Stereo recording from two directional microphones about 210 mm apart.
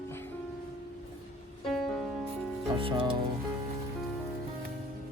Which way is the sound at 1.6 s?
Centre (ahead or behind).